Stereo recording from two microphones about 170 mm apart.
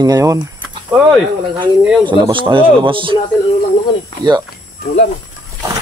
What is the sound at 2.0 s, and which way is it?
Speech, 30° right (ahead or behind).